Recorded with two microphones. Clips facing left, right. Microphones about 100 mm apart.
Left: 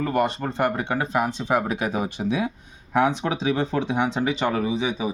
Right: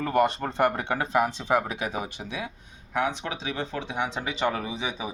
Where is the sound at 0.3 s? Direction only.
25° left (ahead or behind).